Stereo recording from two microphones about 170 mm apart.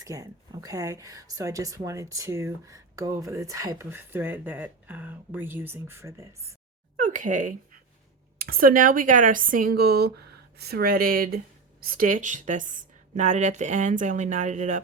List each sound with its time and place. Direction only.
0.0 s speech: 20° right (ahead or behind)
7.0 s speech: 50° right (ahead or behind)